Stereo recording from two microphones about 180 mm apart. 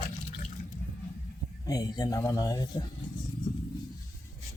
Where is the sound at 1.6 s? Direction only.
20° left (ahead or behind).